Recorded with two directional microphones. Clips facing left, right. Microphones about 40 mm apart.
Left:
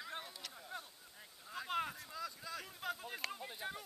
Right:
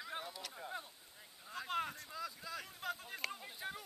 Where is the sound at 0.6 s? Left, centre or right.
Centre.